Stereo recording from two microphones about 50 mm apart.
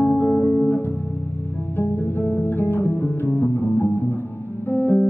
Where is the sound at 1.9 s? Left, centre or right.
Left.